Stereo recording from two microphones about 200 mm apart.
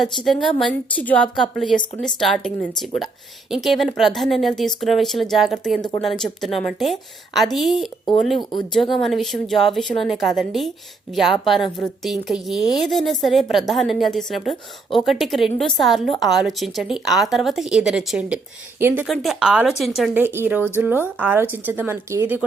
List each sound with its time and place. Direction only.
0.4 s a woman's voice: 5° left (ahead or behind)
8.4 s speech: 20° left (ahead or behind)
8.7 s a woman's voice: centre (ahead or behind)
19.0 s a woman's voice: centre (ahead or behind)